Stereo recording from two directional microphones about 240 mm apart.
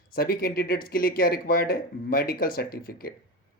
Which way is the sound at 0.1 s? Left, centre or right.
Left.